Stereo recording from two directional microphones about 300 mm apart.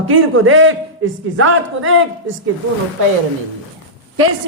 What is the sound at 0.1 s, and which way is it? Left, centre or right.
A man's voice, right.